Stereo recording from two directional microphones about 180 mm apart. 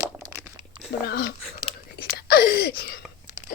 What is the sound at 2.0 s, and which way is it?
Wail, 60° left (ahead or behind).